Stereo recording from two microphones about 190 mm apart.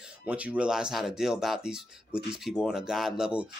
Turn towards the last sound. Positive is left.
turn(degrees=-5)  # may be behind; listen again after turning